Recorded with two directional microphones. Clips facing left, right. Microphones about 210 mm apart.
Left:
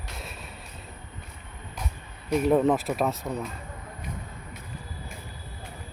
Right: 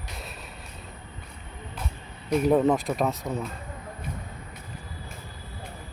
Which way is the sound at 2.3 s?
Centre (ahead or behind).